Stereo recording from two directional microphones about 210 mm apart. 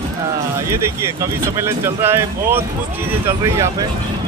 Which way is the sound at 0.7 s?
10° right (ahead or behind).